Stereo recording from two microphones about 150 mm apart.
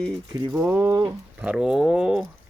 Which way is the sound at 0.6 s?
15° right (ahead or behind).